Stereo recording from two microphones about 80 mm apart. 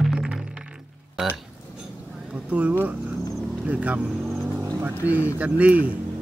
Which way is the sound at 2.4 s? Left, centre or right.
Centre.